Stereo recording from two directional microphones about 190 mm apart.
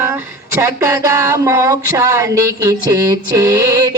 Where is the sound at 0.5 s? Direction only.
15° right (ahead or behind).